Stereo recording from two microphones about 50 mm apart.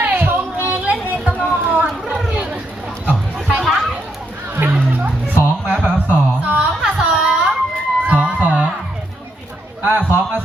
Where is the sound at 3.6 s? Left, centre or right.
Centre.